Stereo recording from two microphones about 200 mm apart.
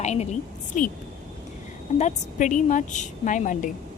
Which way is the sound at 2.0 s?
35° left (ahead or behind).